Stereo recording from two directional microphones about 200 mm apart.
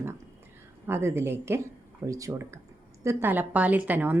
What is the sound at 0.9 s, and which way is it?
A woman's voice, 10° right (ahead or behind).